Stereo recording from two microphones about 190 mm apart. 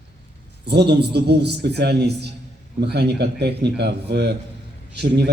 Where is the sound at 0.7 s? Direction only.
60° right (ahead or behind).